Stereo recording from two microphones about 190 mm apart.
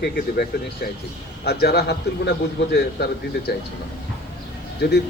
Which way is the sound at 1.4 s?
55° left (ahead or behind).